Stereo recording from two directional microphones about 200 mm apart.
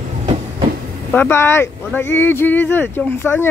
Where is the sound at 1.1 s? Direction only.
10° left (ahead or behind).